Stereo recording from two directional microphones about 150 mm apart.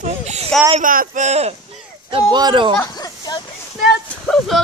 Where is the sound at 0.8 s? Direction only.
65° right (ahead or behind); by 1.5 s 45° right (ahead or behind).